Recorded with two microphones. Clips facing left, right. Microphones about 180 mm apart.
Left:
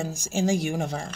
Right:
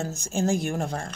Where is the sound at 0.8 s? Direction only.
Centre (ahead or behind).